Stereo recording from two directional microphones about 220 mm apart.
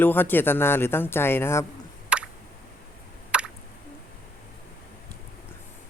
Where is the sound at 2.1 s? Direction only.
5° right (ahead or behind).